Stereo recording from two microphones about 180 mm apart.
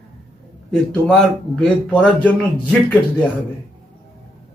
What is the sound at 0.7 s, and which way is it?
Speech, 5° left (ahead or behind).